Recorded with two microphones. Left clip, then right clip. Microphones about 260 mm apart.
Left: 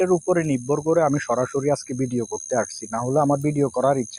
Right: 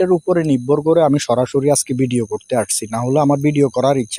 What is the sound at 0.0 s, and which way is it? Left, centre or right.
Speech, right.